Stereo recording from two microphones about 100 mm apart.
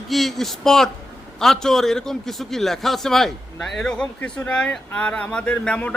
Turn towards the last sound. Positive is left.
turn(degrees=10)  # may be behind; listen again after turning